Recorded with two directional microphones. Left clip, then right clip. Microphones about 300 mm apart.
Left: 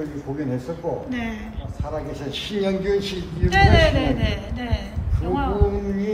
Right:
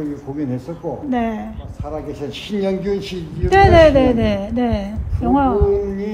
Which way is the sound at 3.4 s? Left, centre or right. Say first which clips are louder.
Right 7 dB; centre.